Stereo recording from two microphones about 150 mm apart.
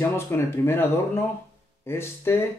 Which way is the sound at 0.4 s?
15° left (ahead or behind).